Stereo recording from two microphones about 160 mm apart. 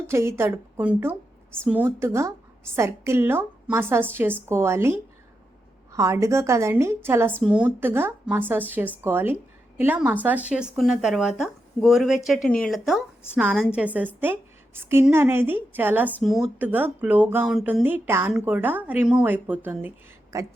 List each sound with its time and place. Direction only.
0.1 s a woman's voice: 15° right (ahead or behind)
16.1 s a woman's voice: centre (ahead or behind); by 20.5 s 20° right (ahead or behind)